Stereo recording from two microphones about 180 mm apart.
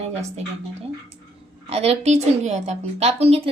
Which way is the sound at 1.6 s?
35° right (ahead or behind).